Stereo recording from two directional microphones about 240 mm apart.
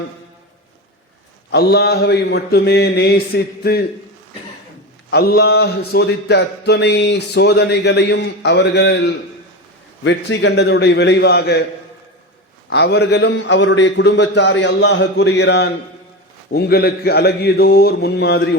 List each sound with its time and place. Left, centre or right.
1.5 s speech: left
5.1 s speech: left
12.7 s a man's voice: left